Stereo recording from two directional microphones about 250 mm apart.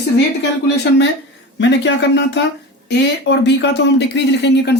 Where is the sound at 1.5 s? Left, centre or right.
Left.